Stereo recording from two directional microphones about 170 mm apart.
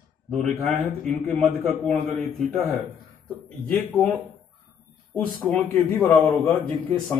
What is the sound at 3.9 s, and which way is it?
Speech, 5° left (ahead or behind).